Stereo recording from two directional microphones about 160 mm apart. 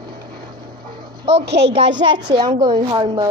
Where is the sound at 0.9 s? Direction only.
25° right (ahead or behind).